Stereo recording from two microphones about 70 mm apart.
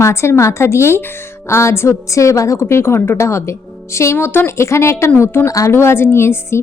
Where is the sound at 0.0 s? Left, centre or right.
Left.